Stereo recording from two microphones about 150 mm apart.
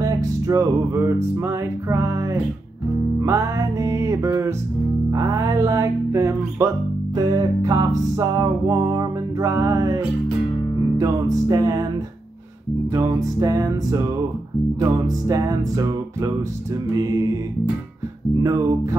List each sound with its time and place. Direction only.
0.0 s music: 25° right (ahead or behind)
12.9 s music: 25° right (ahead or behind)